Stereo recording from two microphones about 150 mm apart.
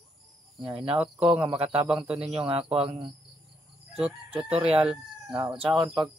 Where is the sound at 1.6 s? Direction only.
40° right (ahead or behind).